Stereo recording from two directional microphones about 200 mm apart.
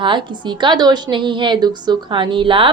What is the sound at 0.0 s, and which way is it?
A woman's voice, 25° right (ahead or behind).